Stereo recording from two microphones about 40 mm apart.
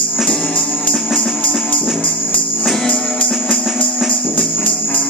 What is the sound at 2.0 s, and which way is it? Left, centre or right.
Music, left.